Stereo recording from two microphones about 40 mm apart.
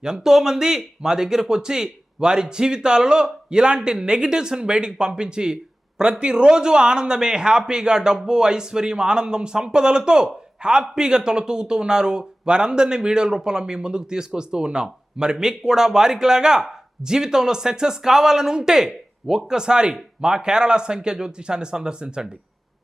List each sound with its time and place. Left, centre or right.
0.0 s speech: centre